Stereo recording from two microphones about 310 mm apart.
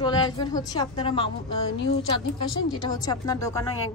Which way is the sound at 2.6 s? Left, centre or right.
Centre.